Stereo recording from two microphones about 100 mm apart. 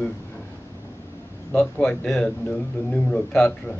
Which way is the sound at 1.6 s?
5° left (ahead or behind).